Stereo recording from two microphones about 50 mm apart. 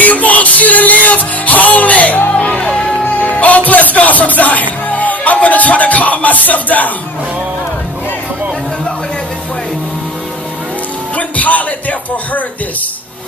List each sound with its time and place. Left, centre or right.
0.0 s music: left
3.0 s music: left
11.1 s music: left